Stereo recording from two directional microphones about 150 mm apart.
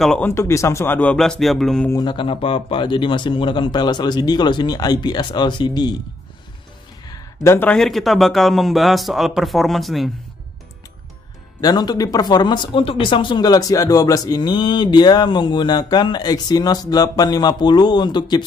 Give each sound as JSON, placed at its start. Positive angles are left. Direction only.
{"t": 0.0, "sound": "speech", "side_deg": 5}
{"t": 0.3, "sound": "speech", "side_deg": 20}
{"t": 1.9, "sound": "speech", "side_deg": 30}
{"t": 7.1, "sound": "a sound", "side_deg": 15}
{"t": 7.7, "sound": "speech", "side_deg": 0}
{"t": 11.6, "sound": "speech", "side_deg": 25}